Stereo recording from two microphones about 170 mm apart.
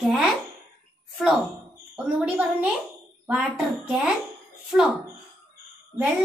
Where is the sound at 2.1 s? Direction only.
10° right (ahead or behind).